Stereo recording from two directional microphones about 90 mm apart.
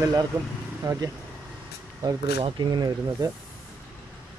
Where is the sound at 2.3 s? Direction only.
65° right (ahead or behind).